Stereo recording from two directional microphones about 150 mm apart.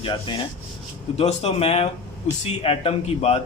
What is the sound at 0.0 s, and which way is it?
Speech, 30° left (ahead or behind).